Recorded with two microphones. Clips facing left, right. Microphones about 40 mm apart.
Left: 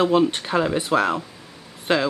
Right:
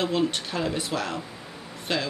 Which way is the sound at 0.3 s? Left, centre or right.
Left.